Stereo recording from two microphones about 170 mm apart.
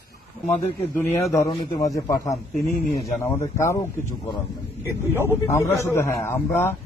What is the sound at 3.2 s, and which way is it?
Speech, 15° left (ahead or behind).